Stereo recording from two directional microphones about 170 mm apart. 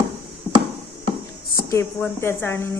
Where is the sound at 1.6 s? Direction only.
15° left (ahead or behind).